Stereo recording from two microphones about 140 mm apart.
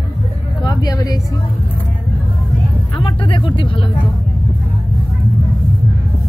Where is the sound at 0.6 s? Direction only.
30° left (ahead or behind).